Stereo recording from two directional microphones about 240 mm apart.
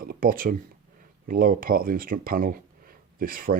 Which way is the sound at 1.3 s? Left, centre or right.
Right.